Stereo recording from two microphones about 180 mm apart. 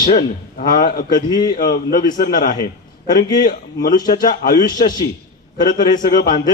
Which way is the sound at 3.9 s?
20° left (ahead or behind).